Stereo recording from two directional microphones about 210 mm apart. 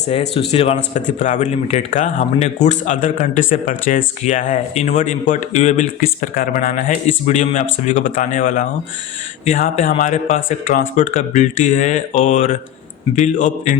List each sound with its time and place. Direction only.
0.1 s a man's voice: 30° left (ahead or behind)